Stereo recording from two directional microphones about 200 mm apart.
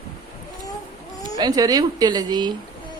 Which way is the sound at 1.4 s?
20° right (ahead or behind).